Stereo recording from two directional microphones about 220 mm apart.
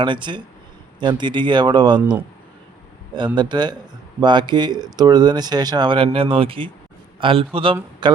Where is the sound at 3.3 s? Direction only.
20° right (ahead or behind).